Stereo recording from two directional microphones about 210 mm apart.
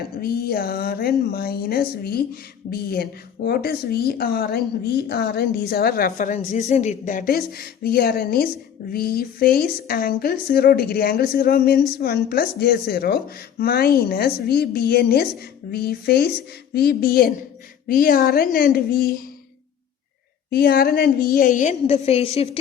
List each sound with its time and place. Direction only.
0.2 s a woman's voice: 45° left (ahead or behind)
20.5 s a woman's voice: 45° left (ahead or behind); by 22.5 s 30° left (ahead or behind)